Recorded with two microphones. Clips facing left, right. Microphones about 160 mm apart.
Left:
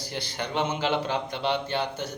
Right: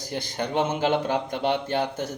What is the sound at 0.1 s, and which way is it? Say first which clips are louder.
A man's voice: right 4 dB; 45° right (ahead or behind).